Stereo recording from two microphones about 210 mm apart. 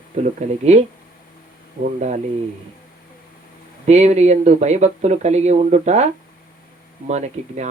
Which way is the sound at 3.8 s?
30° right (ahead or behind).